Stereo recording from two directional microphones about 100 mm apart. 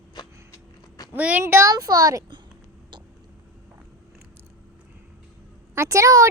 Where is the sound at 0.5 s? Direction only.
40° left (ahead or behind).